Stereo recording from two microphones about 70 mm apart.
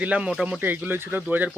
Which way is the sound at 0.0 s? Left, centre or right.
Centre.